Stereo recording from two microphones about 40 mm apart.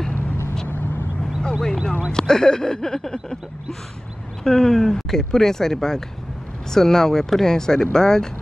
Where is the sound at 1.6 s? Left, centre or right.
Centre.